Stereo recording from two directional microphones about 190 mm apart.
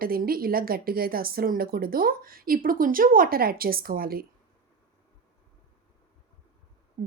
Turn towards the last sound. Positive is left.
turn(degrees=-55)  # may be behind; listen again after turning